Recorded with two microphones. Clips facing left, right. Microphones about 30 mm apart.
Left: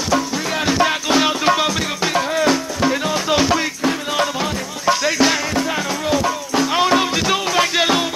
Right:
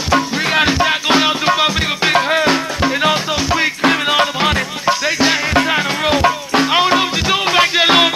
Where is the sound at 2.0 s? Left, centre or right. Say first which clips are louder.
Right 4 dB; right.